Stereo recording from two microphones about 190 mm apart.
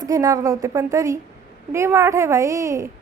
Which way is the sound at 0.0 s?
20° right (ahead or behind).